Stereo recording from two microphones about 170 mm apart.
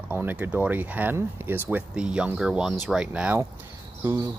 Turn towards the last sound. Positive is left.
turn(degrees=-20)  # may be behind; listen again after turning